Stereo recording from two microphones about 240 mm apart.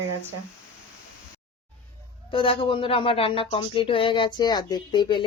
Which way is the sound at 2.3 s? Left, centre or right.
Left.